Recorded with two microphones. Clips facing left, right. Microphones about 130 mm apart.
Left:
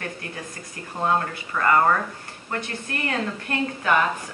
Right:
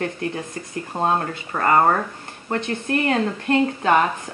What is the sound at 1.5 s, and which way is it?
Speech, 30° right (ahead or behind).